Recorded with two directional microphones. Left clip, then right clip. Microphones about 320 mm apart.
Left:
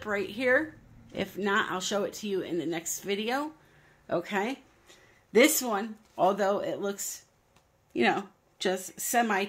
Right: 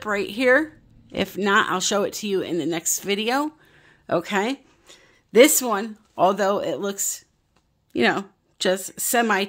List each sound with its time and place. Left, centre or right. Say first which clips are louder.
0.0 s speech: right 8 dB; right